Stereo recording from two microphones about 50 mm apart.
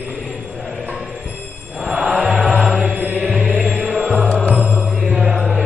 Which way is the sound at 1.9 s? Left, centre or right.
Centre.